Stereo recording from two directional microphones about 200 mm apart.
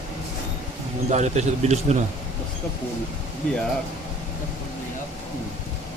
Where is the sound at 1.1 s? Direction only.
35° right (ahead or behind).